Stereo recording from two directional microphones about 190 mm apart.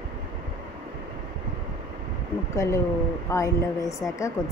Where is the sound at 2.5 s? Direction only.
15° left (ahead or behind).